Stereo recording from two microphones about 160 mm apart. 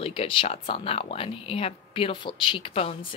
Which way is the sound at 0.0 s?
35° left (ahead or behind).